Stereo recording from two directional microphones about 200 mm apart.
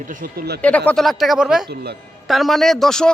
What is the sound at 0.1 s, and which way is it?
Speech, 45° right (ahead or behind).